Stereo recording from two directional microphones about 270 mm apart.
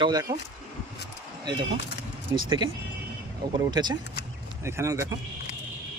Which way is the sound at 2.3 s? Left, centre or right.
Centre.